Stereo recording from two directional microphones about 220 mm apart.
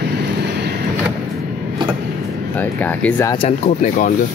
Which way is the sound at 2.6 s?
5° left (ahead or behind).